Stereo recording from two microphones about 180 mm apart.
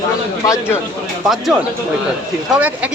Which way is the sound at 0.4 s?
15° left (ahead or behind).